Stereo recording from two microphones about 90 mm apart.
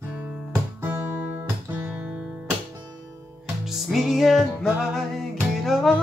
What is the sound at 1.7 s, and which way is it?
Guitar, 20° right (ahead or behind).